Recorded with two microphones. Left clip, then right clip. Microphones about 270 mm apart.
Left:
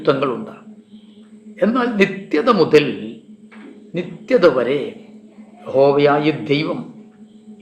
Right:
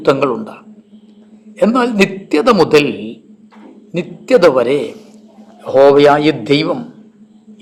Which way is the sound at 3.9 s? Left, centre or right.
Right.